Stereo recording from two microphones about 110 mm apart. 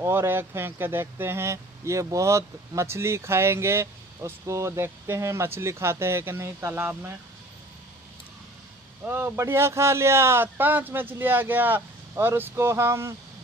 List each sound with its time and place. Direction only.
0.0 s speech: 20° right (ahead or behind)
9.0 s speech: 20° right (ahead or behind)